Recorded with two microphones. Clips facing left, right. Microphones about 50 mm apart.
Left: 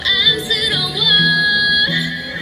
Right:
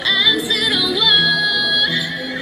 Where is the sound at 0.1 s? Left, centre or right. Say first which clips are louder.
Even; centre.